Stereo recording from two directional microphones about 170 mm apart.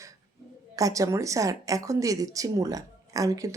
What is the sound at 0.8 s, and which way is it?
Speech, 20° right (ahead or behind).